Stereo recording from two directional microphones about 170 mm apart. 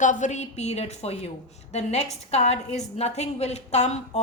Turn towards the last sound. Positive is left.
turn(degrees=40)  # may be behind; listen again after turning